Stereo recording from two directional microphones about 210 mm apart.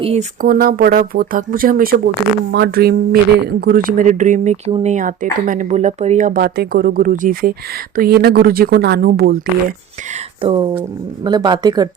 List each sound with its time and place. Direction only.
0.0 s speech: 30° right (ahead or behind)
0.4 s speech: 45° right (ahead or behind)
10.1 s speech: 25° right (ahead or behind)